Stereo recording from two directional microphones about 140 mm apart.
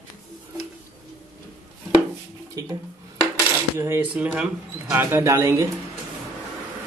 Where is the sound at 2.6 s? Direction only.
25° right (ahead or behind).